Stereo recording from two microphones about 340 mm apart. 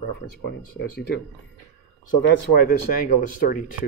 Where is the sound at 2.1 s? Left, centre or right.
Left.